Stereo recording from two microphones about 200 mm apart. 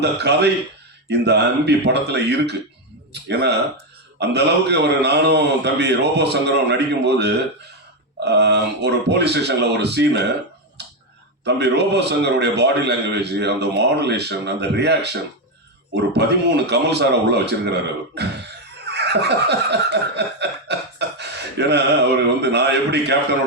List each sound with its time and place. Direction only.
0.0 s a man's voice: 55° right (ahead or behind)
10.8 s a sound: 60° right (ahead or behind)
11.4 s a man's voice: 55° right (ahead or behind)
18.9 s snicker: 55° right (ahead or behind)
21.2 s a sound: 55° right (ahead or behind)
22.4 s a man's voice: 55° right (ahead or behind)